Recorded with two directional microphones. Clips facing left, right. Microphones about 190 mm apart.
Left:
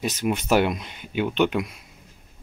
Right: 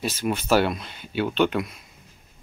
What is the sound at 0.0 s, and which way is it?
Speech, 15° left (ahead or behind).